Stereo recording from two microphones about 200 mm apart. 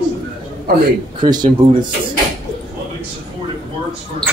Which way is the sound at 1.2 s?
20° right (ahead or behind).